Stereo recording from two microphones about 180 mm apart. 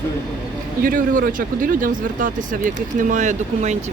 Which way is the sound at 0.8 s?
50° right (ahead or behind).